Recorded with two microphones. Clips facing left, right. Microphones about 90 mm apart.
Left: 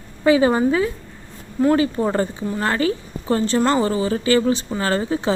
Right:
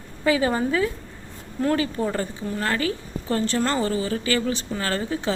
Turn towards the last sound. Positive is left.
turn(degrees=25)  # may be behind; listen again after turning